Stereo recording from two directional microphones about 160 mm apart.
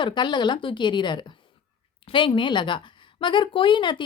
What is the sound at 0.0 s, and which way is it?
A woman's voice, 30° left (ahead or behind).